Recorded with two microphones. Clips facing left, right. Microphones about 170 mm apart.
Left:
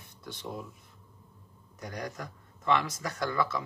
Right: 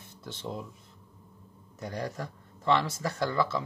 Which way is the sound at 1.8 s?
30° right (ahead or behind).